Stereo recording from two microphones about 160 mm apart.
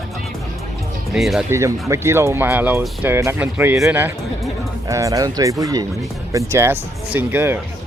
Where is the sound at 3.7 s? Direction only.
Centre (ahead or behind).